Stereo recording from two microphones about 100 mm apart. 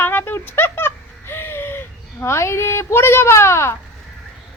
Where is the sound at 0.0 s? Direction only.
20° left (ahead or behind).